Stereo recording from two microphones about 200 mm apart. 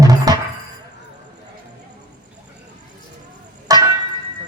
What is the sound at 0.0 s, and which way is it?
Music, 20° right (ahead or behind).